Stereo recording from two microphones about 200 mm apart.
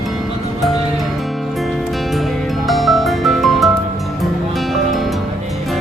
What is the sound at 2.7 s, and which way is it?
Music, centre (ahead or behind).